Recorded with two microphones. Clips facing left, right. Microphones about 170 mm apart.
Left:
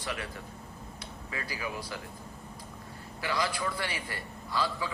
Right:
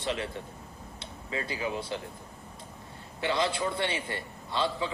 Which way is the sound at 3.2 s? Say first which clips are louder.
Right 3 dB; 25° right (ahead or behind).